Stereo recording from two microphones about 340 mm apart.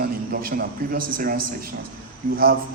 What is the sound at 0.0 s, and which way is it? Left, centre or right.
A man's voice, right.